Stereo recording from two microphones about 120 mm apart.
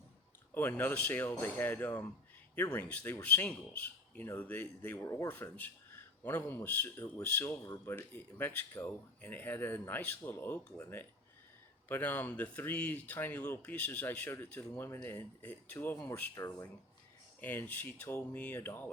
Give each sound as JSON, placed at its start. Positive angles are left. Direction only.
{"t": 0.5, "sound": "speech", "side_deg": 15}
{"t": 11.9, "sound": "speech", "side_deg": 15}
{"t": 17.4, "sound": "speech", "side_deg": 15}